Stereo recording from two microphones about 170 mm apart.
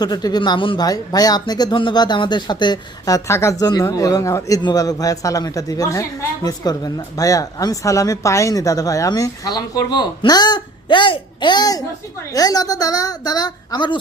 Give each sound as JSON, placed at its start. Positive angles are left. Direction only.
{"t": 0.0, "sound": "speech", "side_deg": 25}